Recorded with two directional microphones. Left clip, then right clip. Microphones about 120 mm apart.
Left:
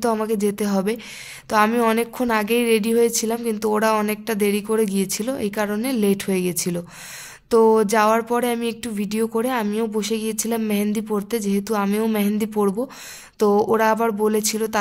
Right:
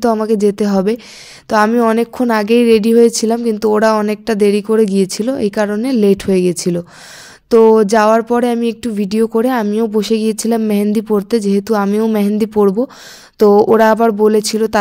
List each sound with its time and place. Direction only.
0.3 s a woman's voice: 40° right (ahead or behind)
1.7 s a woman's voice: 25° right (ahead or behind)
2.0 s a woman's voice: 45° right (ahead or behind)
11.8 s a woman's voice: 30° right (ahead or behind)
12.2 s a woman's voice: 45° right (ahead or behind)